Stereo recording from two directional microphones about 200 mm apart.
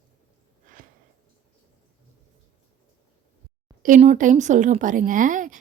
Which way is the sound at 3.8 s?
35° right (ahead or behind).